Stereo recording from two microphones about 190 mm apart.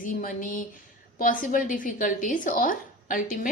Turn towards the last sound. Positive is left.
turn(degrees=45)  # may be behind; listen again after turning